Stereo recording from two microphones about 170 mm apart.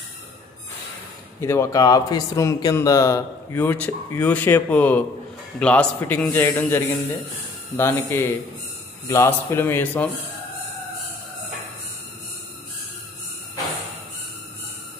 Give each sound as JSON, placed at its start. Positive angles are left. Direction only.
{"t": 1.4, "sound": "a man's voice", "side_deg": 15}